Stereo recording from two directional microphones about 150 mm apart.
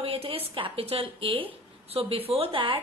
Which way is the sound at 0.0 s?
40° right (ahead or behind).